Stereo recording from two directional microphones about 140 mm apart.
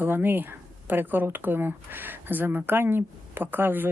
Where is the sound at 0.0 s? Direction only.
15° right (ahead or behind).